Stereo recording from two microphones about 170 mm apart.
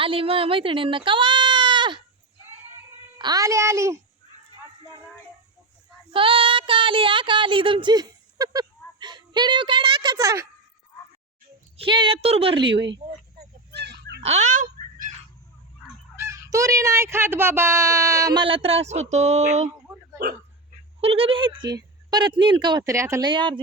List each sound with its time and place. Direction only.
0.0 s speech: 30° right (ahead or behind)
3.2 s a child's voice: 25° right (ahead or behind)
6.1 s speech: 30° right (ahead or behind)
11.8 s a woman's voice: 30° right (ahead or behind)
13.7 s dog: 80° right
14.2 s a sound: 40° right (ahead or behind)
16.1 s speech: 15° right (ahead or behind); by 19.7 s 45° right (ahead or behind)
21.0 s speech: 35° right (ahead or behind); by 23.3 s 15° right (ahead or behind)
23.3 s speech: 30° right (ahead or behind)